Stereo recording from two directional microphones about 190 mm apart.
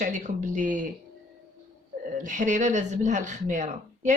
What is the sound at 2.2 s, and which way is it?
Speech, 40° right (ahead or behind).